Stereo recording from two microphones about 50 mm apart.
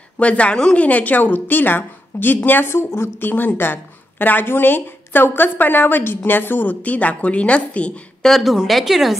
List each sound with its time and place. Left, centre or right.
0.2 s a woman's voice: left
0.8 s speech: left
2.7 s a woman's voice: left
3.3 s speech: left
8.2 s a woman's voice: centre